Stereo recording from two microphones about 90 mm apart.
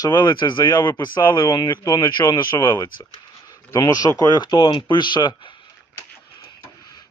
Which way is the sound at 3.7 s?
45° left (ahead or behind).